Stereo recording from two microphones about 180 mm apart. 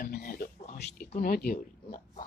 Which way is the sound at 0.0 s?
55° left (ahead or behind).